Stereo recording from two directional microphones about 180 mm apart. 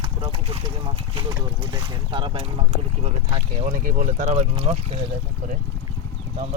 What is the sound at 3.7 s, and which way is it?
Speech, 50° right (ahead or behind).